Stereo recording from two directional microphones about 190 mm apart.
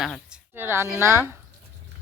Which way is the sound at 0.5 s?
10° right (ahead or behind).